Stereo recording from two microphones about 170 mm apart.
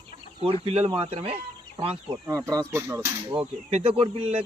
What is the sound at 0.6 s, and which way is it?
Speech, 35° right (ahead or behind).